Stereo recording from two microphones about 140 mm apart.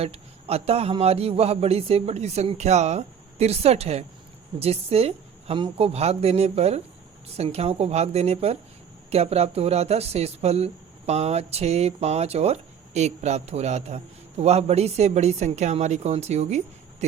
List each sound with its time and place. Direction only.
0.0 s speech: 45° right (ahead or behind)